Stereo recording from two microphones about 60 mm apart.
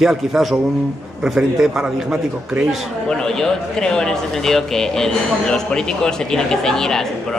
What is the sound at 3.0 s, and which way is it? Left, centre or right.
A man's voice, centre.